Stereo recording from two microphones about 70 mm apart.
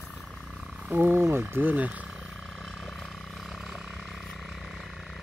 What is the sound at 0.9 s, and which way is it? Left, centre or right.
Speech, right.